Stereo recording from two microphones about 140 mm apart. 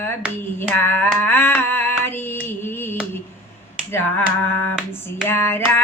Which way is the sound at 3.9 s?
15° left (ahead or behind).